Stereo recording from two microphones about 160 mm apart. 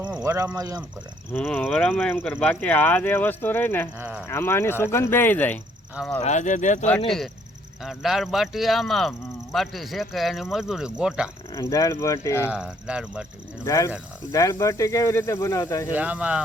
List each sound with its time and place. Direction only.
0.2 s speech: 15° right (ahead or behind)
1.3 s speech: 10° left (ahead or behind)
3.9 s speech: 15° right (ahead or behind)
4.2 s speech: 15° left (ahead or behind)
6.1 s speech: 45° left (ahead or behind)
7.8 s speech: centre (ahead or behind)
11.5 s speech: 20° left (ahead or behind)
12.5 s speech: 5° right (ahead or behind)
13.7 s speech: 20° left (ahead or behind)
16.0 s speech: 10° right (ahead or behind)